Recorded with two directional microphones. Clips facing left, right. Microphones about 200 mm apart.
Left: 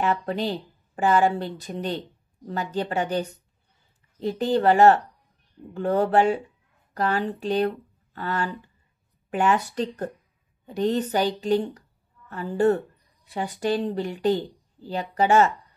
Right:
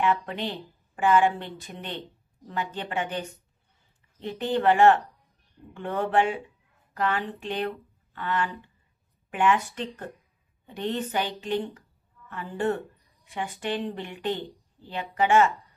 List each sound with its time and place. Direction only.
0.0 s speech: 35° left (ahead or behind)